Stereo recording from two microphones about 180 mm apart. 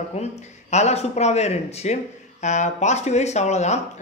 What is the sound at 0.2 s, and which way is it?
A woman's voice, 40° left (ahead or behind).